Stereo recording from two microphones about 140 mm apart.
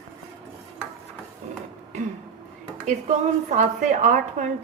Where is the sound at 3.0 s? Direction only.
60° right (ahead or behind).